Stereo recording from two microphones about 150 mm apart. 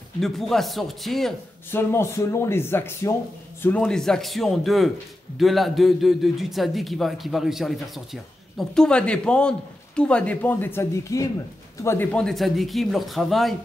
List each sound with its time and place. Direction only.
0.2 s speech: centre (ahead or behind)
1.7 s speech: 15° left (ahead or behind)